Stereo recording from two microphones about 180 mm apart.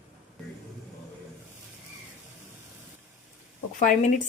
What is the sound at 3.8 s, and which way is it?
Speech, 45° left (ahead or behind).